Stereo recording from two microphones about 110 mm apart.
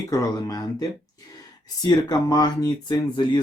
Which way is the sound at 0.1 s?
30° left (ahead or behind).